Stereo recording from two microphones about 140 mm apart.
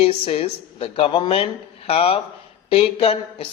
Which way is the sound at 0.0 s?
45° left (ahead or behind).